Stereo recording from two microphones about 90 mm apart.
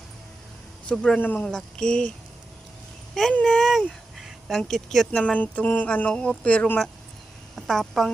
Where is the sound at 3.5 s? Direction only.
Centre (ahead or behind).